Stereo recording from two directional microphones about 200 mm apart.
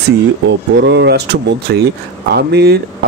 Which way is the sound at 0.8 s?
60° right (ahead or behind).